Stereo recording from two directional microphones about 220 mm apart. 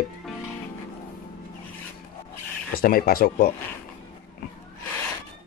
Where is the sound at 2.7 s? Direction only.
45° left (ahead or behind).